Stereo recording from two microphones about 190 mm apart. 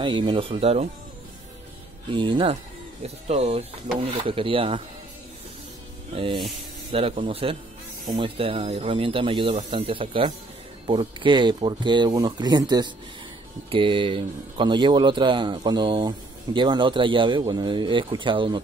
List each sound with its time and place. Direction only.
0.0 s a man's voice: 25° right (ahead or behind)
2.1 s a man's voice: 25° right (ahead or behind)
6.1 s a man's voice: 30° right (ahead or behind)